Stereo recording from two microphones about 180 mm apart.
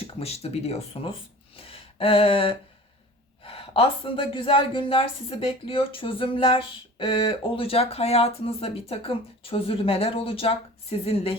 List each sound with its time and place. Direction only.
0.1 s speech: 35° left (ahead or behind)
1.5 s a sound: 30° left (ahead or behind)
3.4 s speech: 30° left (ahead or behind)